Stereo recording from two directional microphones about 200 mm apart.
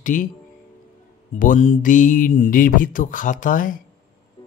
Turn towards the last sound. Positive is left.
turn(degrees=40)  # may be behind; listen again after turning